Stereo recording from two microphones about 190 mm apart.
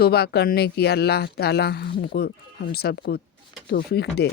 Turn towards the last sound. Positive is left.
turn(degrees=60)  # may be behind; listen again after turning